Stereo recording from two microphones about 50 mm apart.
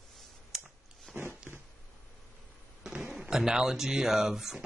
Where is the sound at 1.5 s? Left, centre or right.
Centre.